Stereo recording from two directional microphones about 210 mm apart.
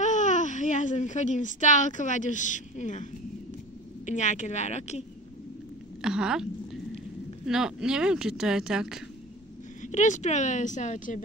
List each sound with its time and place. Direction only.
0.0 s a woman's voice: 35° left (ahead or behind)
6.0 s speech: 5° right (ahead or behind)
9.8 s a woman's voice: 35° left (ahead or behind)